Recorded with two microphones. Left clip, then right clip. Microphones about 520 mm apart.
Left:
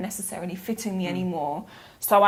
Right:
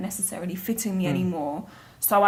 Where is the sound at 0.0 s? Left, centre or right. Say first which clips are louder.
Even; centre.